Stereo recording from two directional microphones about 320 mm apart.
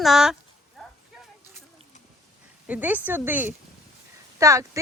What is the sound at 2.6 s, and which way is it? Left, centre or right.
Speech, centre.